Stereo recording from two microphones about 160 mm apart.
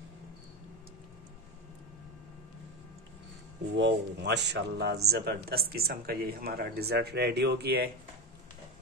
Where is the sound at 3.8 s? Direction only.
90° right.